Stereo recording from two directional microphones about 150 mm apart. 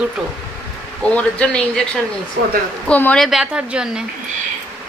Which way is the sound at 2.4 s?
90° right.